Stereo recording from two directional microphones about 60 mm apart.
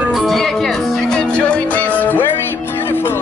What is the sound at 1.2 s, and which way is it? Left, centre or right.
Music, left.